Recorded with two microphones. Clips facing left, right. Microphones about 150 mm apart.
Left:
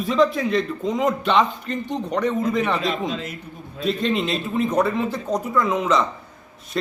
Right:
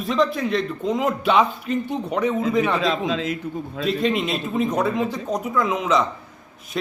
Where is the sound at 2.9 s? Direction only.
90° right.